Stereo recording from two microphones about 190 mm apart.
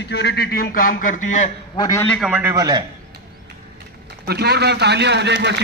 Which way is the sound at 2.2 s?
5° right (ahead or behind).